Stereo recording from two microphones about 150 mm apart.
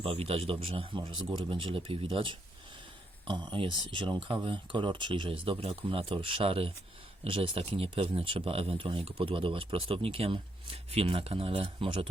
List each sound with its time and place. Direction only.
0.0 s speech: 40° right (ahead or behind)